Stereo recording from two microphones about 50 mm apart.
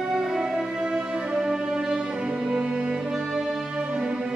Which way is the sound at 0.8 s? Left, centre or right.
Right.